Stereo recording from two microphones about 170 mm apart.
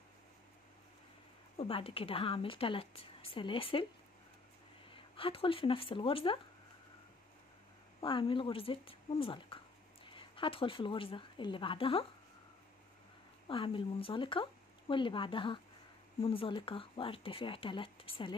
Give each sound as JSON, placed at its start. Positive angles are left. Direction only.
{"t": 1.6, "sound": "a woman's voice", "side_deg": 35}
{"t": 4.8, "sound": "speech", "side_deg": 30}
{"t": 8.0, "sound": "a woman's voice", "side_deg": 30}
{"t": 13.5, "sound": "a woman's voice", "side_deg": 30}